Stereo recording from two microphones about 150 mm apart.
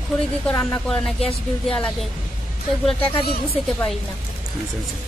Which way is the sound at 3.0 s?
35° left (ahead or behind).